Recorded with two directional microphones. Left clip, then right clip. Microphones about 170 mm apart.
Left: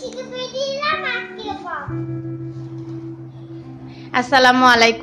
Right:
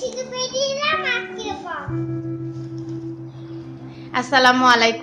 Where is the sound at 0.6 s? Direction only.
5° right (ahead or behind).